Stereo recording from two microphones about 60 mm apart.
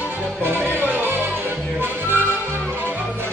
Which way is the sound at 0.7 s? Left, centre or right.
Right.